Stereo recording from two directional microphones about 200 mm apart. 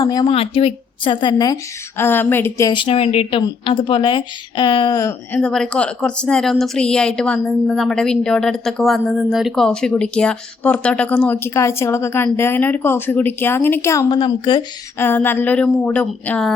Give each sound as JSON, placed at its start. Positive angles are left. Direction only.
{"t": 0.0, "sound": "a woman's voice", "side_deg": 20}
{"t": 5.4, "sound": "speech", "side_deg": 5}
{"t": 14.9, "sound": "a woman's voice", "side_deg": 10}